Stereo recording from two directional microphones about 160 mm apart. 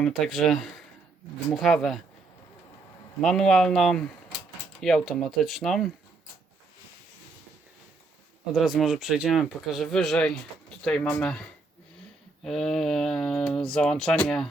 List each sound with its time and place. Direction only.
0.0 s speech: centre (ahead or behind)
3.2 s speech: 5° left (ahead or behind)
8.5 s speech: centre (ahead or behind)